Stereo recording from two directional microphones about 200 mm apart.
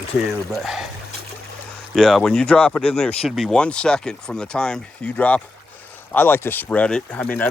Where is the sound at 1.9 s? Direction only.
Centre (ahead or behind).